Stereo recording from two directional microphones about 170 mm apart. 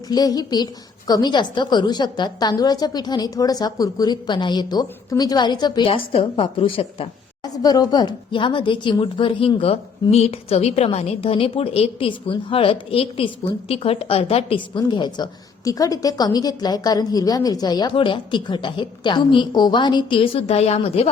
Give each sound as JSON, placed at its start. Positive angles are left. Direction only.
{"t": 0.1, "sound": "speech", "side_deg": 25}
{"t": 7.5, "sound": "speech", "side_deg": 20}